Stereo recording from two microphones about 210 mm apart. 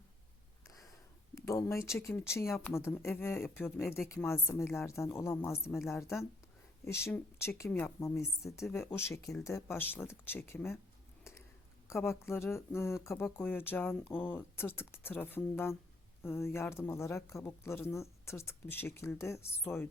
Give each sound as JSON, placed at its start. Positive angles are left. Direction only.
{"t": 0.6, "sound": "a sound", "side_deg": 15}
{"t": 1.5, "sound": "speech", "side_deg": 15}
{"t": 3.9, "sound": "speech", "side_deg": 0}
{"t": 11.9, "sound": "speech", "side_deg": 10}